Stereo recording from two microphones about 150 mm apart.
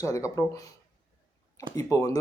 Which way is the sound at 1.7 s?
25° left (ahead or behind).